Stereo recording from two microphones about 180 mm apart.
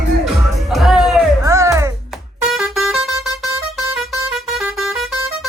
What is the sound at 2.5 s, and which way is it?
Vehicle horn, centre (ahead or behind).